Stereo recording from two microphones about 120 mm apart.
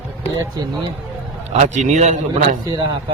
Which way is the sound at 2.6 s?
35° right (ahead or behind).